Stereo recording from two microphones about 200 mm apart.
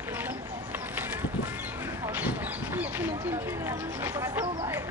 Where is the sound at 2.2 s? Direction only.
10° right (ahead or behind).